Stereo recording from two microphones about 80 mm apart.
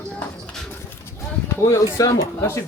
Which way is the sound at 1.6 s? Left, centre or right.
Left.